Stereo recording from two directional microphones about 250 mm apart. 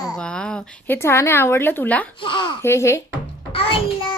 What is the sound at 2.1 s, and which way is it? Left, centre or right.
Speech, centre.